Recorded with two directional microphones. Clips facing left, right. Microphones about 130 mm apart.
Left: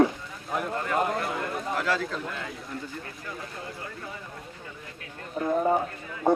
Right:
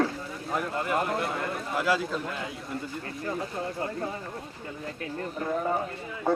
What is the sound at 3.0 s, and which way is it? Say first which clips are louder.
Speech: right 6 dB; 40° right (ahead or behind).